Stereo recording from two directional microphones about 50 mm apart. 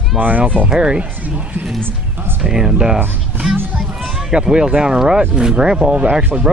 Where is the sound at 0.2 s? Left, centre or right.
Right.